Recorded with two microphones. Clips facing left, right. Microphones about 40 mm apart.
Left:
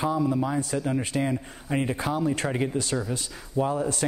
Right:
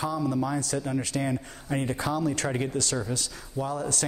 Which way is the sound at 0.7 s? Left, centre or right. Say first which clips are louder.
Left 2 dB; centre.